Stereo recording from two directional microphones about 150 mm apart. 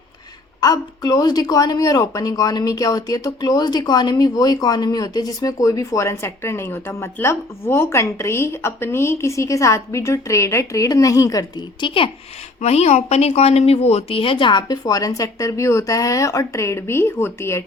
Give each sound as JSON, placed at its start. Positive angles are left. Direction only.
{"t": 0.6, "sound": "speech", "side_deg": 25}
{"t": 12.5, "sound": "speech", "side_deg": 45}